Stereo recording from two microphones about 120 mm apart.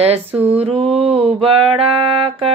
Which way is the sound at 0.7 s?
55° right (ahead or behind).